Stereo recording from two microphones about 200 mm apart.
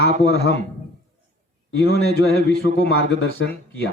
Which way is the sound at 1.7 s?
55° left (ahead or behind).